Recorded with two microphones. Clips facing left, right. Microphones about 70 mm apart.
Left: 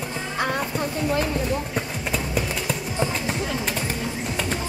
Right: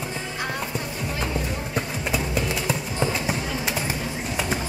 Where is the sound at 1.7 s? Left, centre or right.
Centre.